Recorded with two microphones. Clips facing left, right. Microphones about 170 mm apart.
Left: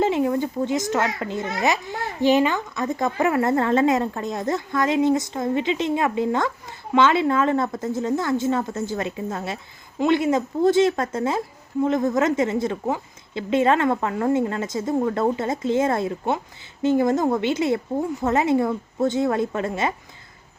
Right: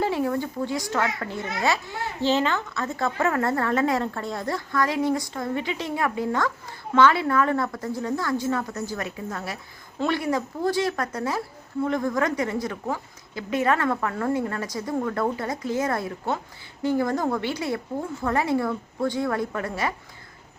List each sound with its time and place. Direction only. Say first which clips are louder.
0.0 s a woman's voice: left 4 dB; 20° left (ahead or behind)